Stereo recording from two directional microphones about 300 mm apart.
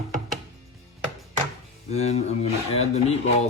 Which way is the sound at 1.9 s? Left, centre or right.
Left.